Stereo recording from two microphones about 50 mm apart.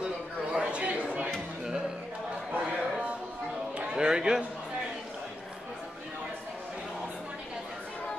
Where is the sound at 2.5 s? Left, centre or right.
Right.